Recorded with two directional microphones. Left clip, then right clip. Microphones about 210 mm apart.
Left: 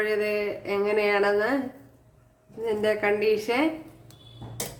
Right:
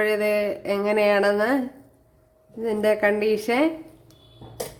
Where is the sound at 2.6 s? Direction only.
35° right (ahead or behind).